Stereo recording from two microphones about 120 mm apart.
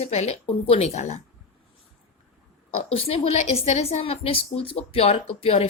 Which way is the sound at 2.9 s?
55° left (ahead or behind).